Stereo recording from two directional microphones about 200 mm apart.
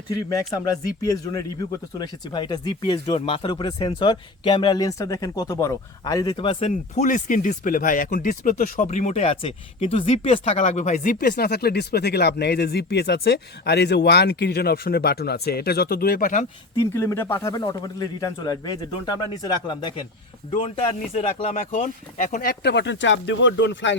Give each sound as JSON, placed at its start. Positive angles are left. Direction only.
{"t": 0.1, "sound": "a man's voice", "side_deg": 15}
{"t": 16.9, "sound": "a man's voice", "side_deg": 15}
{"t": 20.6, "sound": "speech", "side_deg": 35}